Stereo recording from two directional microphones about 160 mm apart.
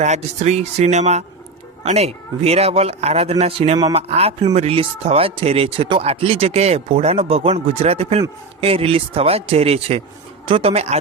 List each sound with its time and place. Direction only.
0.0 s speech: 45° right (ahead or behind)